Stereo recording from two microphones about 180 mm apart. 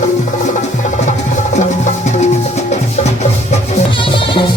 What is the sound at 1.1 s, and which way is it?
Music, 40° left (ahead or behind).